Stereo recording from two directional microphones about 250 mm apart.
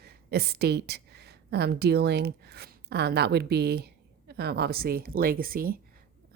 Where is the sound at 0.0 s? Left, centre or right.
Right.